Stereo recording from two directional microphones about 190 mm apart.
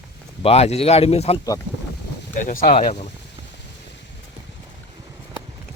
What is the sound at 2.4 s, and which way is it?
Speech, 45° left (ahead or behind).